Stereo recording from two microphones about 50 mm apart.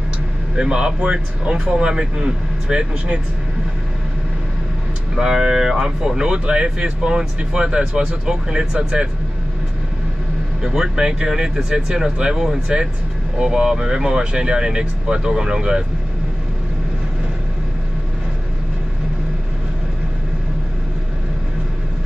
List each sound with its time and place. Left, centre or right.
0.6 s speech: centre
5.1 s speech: centre
10.7 s speech: centre